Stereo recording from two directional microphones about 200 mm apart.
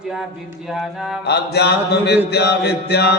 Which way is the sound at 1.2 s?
55° left (ahead or behind).